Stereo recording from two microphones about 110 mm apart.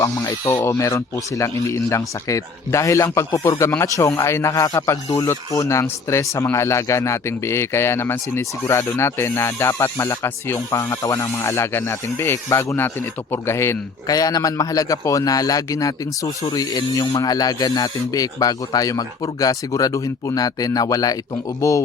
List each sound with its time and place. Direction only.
0.5 s speech: 30° left (ahead or behind)